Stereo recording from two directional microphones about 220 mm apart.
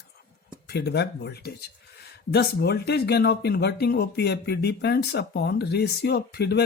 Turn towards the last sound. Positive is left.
turn(degrees=50)  # may be behind; listen again after turning